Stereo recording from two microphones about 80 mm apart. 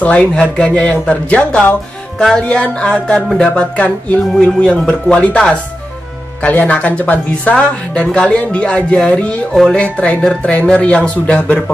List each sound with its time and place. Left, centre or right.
0.0 s speech: centre